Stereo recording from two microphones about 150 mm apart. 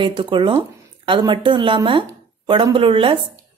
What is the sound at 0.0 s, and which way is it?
A woman's voice, 35° right (ahead or behind).